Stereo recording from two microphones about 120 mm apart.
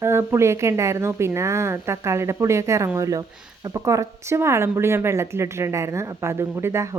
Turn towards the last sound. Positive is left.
turn(degrees=-20)  # may be behind; listen again after turning